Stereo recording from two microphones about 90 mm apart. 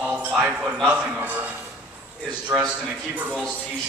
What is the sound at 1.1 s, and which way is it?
Speech, 20° right (ahead or behind).